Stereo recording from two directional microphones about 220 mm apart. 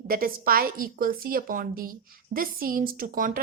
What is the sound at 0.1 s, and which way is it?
A woman's voice, 40° right (ahead or behind).